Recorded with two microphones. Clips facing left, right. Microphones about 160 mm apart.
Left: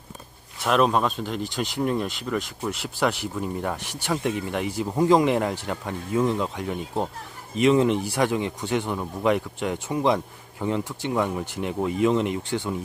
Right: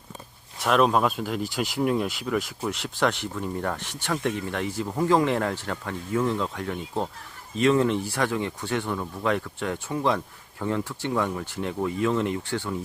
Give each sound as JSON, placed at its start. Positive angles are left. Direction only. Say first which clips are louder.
{"t": 0.6, "sound": "speech", "louder": "even", "side_deg": 0}